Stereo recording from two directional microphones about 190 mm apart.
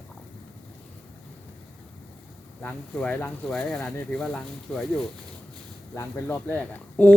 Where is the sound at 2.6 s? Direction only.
5° left (ahead or behind).